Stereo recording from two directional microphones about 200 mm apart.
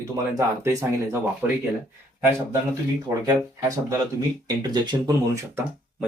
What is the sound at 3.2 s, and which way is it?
Speech, 15° right (ahead or behind).